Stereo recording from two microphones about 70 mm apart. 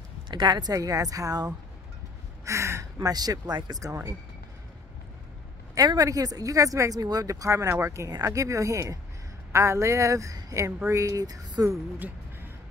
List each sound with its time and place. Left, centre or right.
0.3 s a woman's voice: right
2.4 s speech: right
3.8 s speech: right
5.8 s speech: right